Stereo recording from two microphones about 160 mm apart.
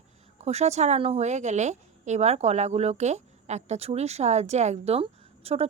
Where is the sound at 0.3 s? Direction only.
45° right (ahead or behind).